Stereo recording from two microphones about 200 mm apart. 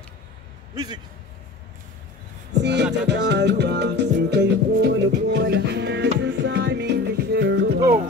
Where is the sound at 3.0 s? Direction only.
60° right (ahead or behind).